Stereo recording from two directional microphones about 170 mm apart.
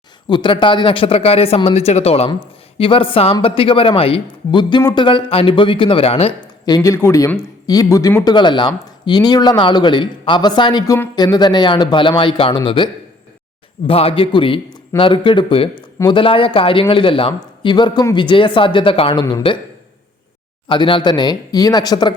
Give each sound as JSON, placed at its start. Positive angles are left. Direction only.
{"t": 0.3, "sound": "speech", "side_deg": 30}
{"t": 6.7, "sound": "speech", "side_deg": 20}
{"t": 20.7, "sound": "speech", "side_deg": 30}